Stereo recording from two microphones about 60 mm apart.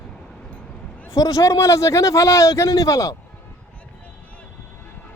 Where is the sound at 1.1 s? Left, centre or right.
Left.